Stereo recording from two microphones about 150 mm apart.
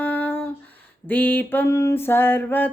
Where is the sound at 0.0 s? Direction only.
10° left (ahead or behind).